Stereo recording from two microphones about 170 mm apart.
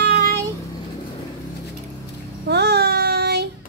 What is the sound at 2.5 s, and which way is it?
Child singing, 75° right (ahead or behind).